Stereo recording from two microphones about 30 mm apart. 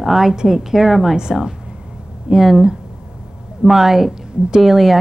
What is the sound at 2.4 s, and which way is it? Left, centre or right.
A woman's voice, centre.